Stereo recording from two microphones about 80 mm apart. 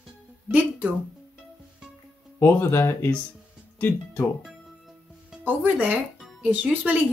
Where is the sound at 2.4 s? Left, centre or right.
Left.